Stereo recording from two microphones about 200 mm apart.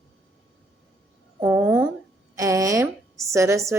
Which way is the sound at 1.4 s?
10° right (ahead or behind).